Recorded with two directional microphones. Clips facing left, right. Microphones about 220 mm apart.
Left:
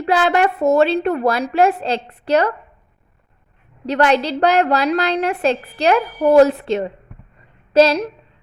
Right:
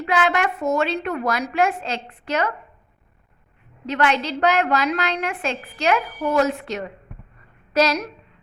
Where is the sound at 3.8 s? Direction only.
35° left (ahead or behind).